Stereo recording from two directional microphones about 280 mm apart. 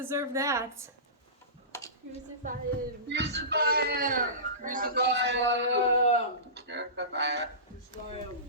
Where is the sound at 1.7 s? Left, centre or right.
Centre.